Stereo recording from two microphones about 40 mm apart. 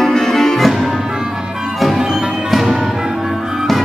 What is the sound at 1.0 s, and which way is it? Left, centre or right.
Music, centre.